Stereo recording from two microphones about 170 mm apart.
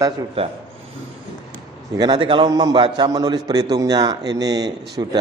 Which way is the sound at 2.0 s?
30° right (ahead or behind).